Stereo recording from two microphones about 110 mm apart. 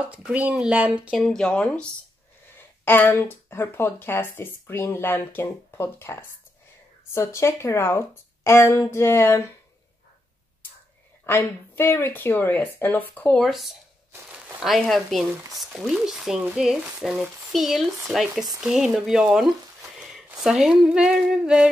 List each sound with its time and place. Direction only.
0.1 s speech: 10° right (ahead or behind)
1.2 s speech: 5° left (ahead or behind)
2.8 s speech: 20° left (ahead or behind)
7.2 s speech: 25° left (ahead or behind)
11.2 s speech: 20° left (ahead or behind)
13.4 s speech: centre (ahead or behind)